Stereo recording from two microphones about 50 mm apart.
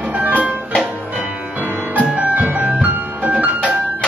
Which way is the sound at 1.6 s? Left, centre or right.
Right.